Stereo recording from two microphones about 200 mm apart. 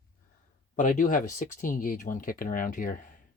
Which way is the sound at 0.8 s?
40° left (ahead or behind).